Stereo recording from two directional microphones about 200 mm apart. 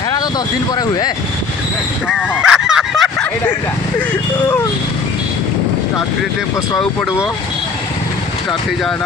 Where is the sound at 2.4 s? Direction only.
5° right (ahead or behind).